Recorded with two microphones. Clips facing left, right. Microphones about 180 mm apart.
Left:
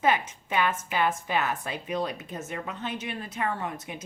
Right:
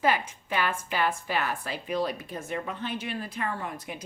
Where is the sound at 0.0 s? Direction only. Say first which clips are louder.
Left 1 dB; 20° left (ahead or behind).